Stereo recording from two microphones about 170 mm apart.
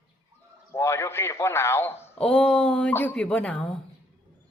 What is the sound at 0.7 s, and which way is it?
Speech, 15° left (ahead or behind).